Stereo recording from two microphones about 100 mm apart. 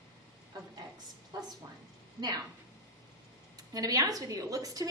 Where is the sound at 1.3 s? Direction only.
40° right (ahead or behind).